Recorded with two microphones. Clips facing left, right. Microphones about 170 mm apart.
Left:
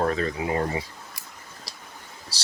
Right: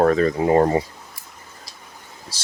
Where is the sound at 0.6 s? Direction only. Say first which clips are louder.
Right 9 dB; 60° right (ahead or behind).